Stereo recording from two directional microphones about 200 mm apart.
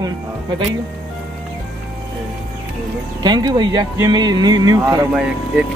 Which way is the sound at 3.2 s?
20° right (ahead or behind).